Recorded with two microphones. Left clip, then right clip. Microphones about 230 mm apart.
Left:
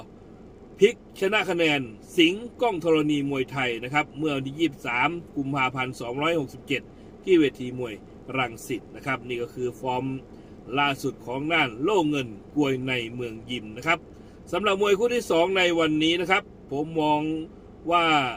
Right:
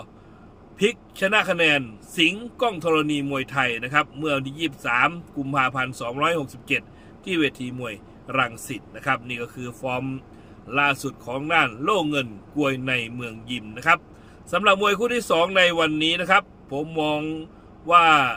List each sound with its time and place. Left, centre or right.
0.8 s a man's voice: centre